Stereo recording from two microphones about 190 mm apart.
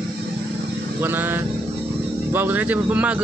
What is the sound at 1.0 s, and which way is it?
Speech, 10° right (ahead or behind).